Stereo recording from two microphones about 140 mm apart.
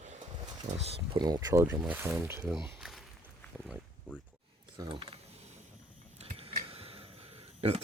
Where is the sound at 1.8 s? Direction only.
15° right (ahead or behind).